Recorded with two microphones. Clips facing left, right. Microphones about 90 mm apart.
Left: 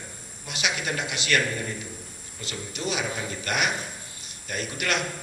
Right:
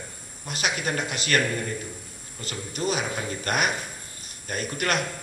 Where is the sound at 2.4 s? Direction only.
45° right (ahead or behind).